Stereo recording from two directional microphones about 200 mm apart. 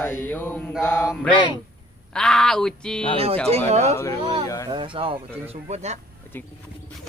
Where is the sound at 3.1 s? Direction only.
30° right (ahead or behind).